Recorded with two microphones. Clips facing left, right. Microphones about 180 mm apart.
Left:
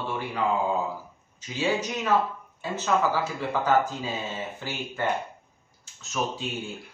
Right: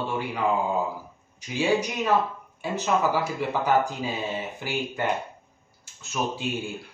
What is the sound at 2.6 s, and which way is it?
Speech, 15° right (ahead or behind).